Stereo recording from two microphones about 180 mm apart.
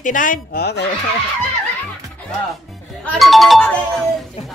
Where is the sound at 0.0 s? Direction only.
50° left (ahead or behind); by 0.8 s 65° left (ahead or behind).